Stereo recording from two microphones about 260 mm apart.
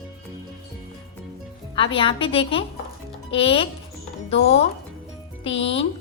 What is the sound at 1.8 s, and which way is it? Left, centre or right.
A woman's voice, centre.